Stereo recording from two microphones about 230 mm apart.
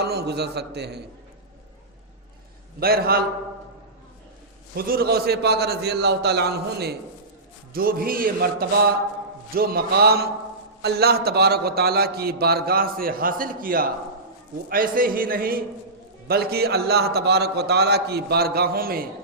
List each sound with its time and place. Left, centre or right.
0.0 s a man's voice: right
2.8 s a man's voice: right
4.7 s a man's voice: right